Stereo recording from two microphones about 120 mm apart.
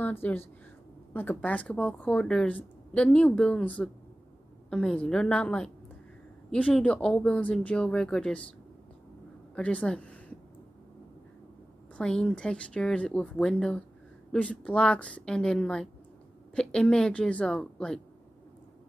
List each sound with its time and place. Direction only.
0.0 s a woman's voice: 15° left (ahead or behind)
9.6 s a woman's voice: 10° left (ahead or behind)
12.0 s a woman's voice: 5° left (ahead or behind)